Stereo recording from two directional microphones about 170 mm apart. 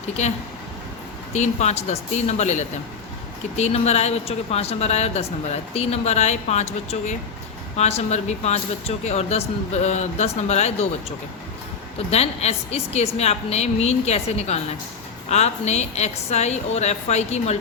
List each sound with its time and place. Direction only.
1.3 s a woman's voice: 40° left (ahead or behind)
11.9 s a woman's voice: 35° left (ahead or behind)